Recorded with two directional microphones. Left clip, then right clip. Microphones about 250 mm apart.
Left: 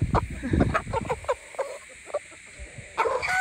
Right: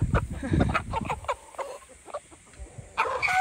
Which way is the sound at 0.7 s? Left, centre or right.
Centre.